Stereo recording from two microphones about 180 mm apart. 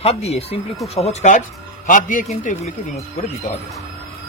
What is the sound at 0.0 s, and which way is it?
A man's voice, 35° left (ahead or behind).